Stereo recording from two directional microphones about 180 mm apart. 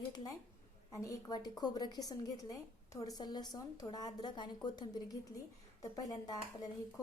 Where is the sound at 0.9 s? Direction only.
20° left (ahead or behind).